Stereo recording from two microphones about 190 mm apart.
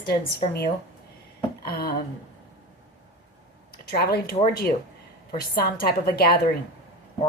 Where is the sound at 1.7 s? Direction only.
55° left (ahead or behind).